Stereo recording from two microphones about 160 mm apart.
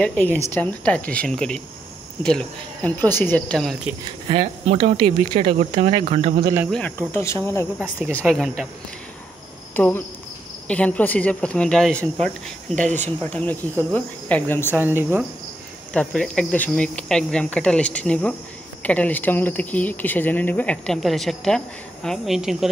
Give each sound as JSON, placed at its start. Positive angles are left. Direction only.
{"t": 0.0, "sound": "speech", "side_deg": 10}
{"t": 4.3, "sound": "speech", "side_deg": -35}
{"t": 7.1, "sound": "speech", "side_deg": 15}
{"t": 8.3, "sound": "speech", "side_deg": 0}
{"t": 9.8, "sound": "speech", "side_deg": 10}
{"t": 14.8, "sound": "cricket", "side_deg": -15}
{"t": 15.9, "sound": "speech", "side_deg": 5}